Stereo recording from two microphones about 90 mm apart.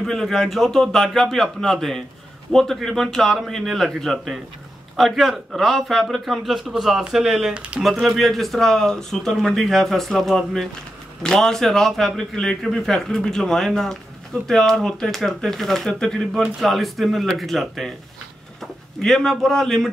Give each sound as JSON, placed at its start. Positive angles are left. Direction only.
{"t": 0.0, "sound": "speech", "side_deg": 5}